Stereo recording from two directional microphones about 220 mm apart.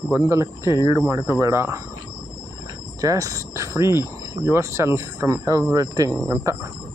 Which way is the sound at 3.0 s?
15° right (ahead or behind).